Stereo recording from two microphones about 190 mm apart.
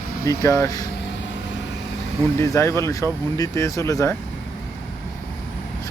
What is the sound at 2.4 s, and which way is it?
Speech, 15° left (ahead or behind).